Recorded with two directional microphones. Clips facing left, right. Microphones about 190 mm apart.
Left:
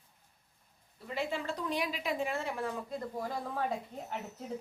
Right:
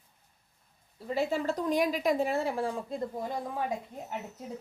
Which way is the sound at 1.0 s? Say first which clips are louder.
Right 6 dB; 40° right (ahead or behind).